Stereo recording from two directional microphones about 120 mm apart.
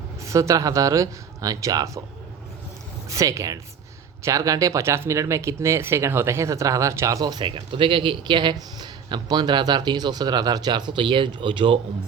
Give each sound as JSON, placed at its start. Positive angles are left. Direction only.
{"t": 0.2, "sound": "speech", "side_deg": -25}
{"t": 3.1, "sound": "speech", "side_deg": -25}